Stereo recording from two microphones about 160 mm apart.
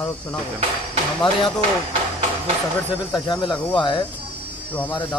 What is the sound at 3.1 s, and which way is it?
Speech, 25° left (ahead or behind).